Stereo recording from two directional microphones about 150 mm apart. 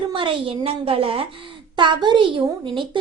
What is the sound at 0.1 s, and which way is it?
A woman's voice, 35° right (ahead or behind).